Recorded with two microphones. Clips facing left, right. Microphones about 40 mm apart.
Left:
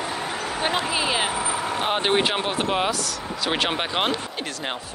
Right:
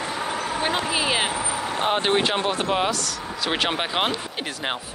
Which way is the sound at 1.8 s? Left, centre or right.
Centre.